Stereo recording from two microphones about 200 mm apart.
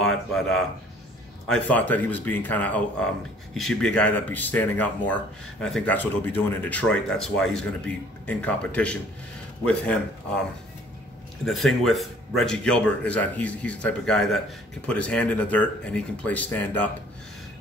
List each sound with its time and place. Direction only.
0.0 s a man's voice: centre (ahead or behind)
11.4 s a man's voice: centre (ahead or behind)